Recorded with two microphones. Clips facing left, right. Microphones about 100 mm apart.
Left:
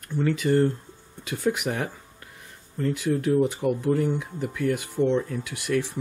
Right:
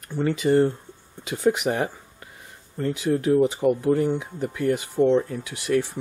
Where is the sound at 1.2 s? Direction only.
Centre (ahead or behind).